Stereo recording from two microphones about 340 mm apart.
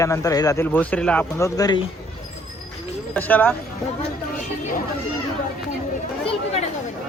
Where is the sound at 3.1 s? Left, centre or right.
Centre.